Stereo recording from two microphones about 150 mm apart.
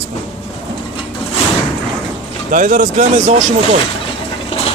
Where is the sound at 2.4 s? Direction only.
65° right (ahead or behind).